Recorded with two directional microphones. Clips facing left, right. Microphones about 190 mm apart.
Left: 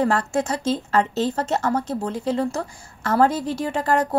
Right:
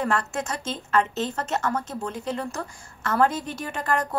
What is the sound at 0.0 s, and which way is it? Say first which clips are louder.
A woman's voice: left 5 dB; 35° left (ahead or behind).